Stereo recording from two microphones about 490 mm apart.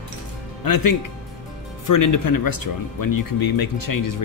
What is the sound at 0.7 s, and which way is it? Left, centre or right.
Speech, left.